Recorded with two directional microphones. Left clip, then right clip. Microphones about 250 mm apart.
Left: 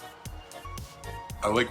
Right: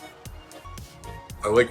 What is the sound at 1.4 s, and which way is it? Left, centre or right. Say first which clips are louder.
Speech: right 6 dB; centre.